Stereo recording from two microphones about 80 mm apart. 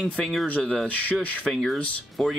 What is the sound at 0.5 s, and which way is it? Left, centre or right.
Speech, centre.